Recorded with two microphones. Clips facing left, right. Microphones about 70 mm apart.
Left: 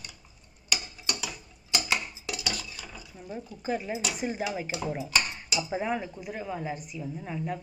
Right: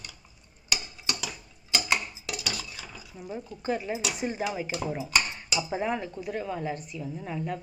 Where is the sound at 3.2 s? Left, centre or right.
Centre.